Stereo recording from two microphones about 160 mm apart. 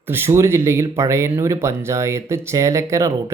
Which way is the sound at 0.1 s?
15° right (ahead or behind).